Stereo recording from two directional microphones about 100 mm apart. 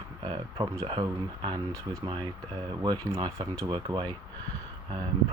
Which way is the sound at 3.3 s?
30° right (ahead or behind).